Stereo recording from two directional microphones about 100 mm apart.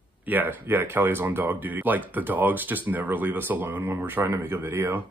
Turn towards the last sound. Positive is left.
turn(degrees=-20)  # may be behind; listen again after turning